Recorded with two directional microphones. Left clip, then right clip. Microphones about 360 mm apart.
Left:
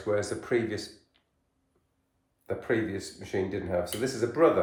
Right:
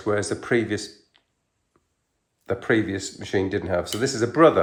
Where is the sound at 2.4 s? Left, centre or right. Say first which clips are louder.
Right 7 dB; right.